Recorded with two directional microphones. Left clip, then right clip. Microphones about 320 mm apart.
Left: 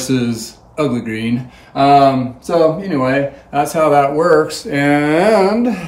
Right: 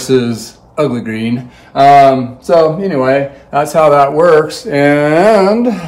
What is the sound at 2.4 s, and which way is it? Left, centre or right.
Speech, centre.